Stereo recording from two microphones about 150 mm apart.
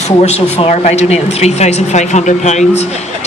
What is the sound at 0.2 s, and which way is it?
A man's voice, 45° left (ahead or behind).